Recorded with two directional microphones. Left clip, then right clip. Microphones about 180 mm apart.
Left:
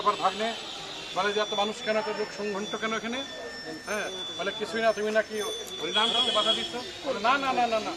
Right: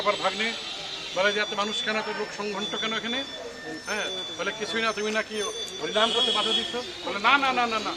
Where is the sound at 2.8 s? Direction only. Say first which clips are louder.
Right 2 dB; 65° left (ahead or behind).